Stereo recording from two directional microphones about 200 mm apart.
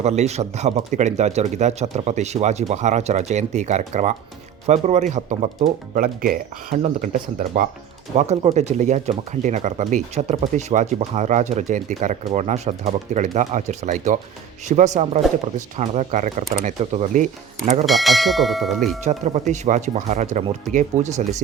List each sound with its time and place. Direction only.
0.0 s speech: 35° right (ahead or behind)
17.8 s speech: centre (ahead or behind)
19.0 s speech: 35° right (ahead or behind)